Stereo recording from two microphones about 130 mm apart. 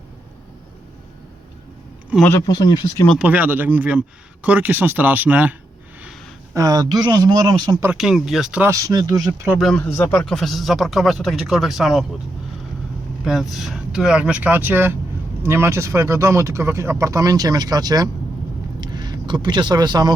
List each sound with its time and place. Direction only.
2.1 s speech: 10° right (ahead or behind)
2.5 s speech: 30° left (ahead or behind)
3.2 s speech: 10° right (ahead or behind)
6.5 s speech: 25° right (ahead or behind)
7.9 s speech: 5° right (ahead or behind)
8.6 s speech: 25° right (ahead or behind)
9.6 s speech: 5° left (ahead or behind)
9.8 s speech: 15° left (ahead or behind); by 12.0 s centre (ahead or behind)
13.2 s speech: centre (ahead or behind); by 20.1 s 35° right (ahead or behind)